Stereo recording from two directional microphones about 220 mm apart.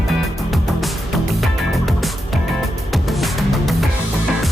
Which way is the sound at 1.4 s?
Centre (ahead or behind).